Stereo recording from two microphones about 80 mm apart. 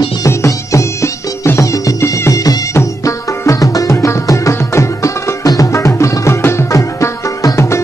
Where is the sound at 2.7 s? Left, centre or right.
Left.